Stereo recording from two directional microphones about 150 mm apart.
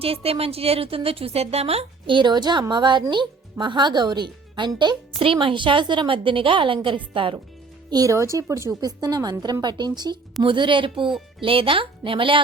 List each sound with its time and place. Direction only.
0.0 s a woman's voice: 40° right (ahead or behind)
7.9 s a woman's voice: 25° right (ahead or behind)